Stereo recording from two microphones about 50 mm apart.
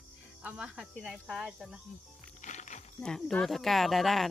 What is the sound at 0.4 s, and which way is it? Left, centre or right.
Speech, right.